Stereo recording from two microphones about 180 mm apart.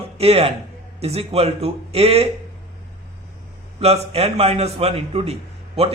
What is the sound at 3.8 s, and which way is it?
A man's voice, 35° right (ahead or behind).